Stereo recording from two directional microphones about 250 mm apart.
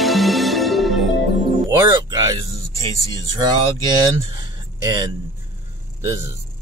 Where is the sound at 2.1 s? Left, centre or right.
Centre.